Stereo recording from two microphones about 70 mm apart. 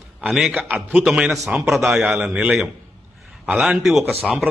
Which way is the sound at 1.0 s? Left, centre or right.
Centre.